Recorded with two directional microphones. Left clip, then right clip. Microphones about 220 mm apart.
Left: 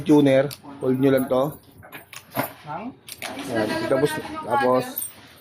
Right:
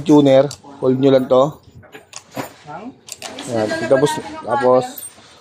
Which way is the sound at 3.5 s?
30° right (ahead or behind).